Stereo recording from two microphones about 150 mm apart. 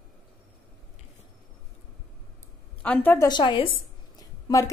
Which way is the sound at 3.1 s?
30° left (ahead or behind).